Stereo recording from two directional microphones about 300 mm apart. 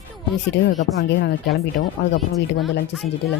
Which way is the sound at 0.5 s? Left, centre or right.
Left.